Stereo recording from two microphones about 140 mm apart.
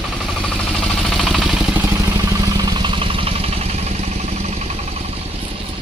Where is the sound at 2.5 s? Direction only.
30° right (ahead or behind); by 4.7 s 50° right (ahead or behind).